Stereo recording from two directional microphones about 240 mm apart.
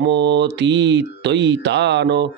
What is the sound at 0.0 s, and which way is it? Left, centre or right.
Speech, right.